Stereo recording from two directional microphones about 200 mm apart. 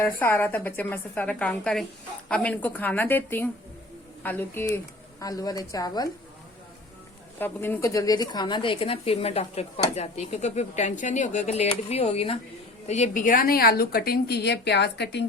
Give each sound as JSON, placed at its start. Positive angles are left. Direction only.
{"t": 0.0, "sound": "a woman's voice", "side_deg": 10}
{"t": 7.3, "sound": "a woman's voice", "side_deg": 10}